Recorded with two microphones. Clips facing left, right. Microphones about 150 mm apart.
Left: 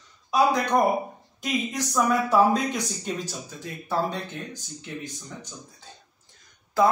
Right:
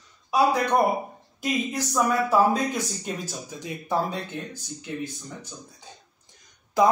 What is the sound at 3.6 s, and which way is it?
Speech, 15° right (ahead or behind).